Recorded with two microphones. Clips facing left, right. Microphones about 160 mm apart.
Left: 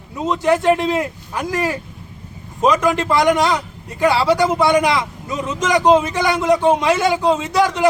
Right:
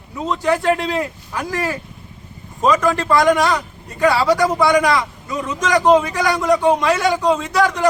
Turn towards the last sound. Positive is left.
turn(degrees=20)  # may be behind; listen again after turning